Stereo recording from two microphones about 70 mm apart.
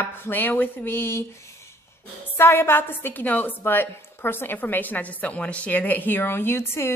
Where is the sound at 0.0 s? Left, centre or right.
Left.